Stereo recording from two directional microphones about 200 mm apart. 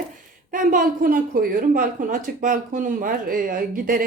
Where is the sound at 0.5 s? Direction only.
40° right (ahead or behind).